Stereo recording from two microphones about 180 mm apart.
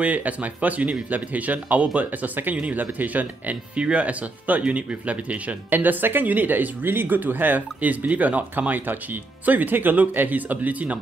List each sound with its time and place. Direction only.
0.0 s speech: 10° right (ahead or behind)